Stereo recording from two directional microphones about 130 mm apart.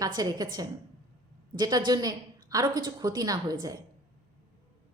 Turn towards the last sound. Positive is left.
turn(degrees=-30)  # may be behind; listen again after turning